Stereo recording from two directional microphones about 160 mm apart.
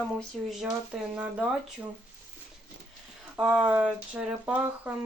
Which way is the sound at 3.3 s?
5° right (ahead or behind).